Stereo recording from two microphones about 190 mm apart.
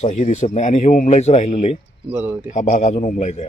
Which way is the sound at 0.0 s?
40° left (ahead or behind).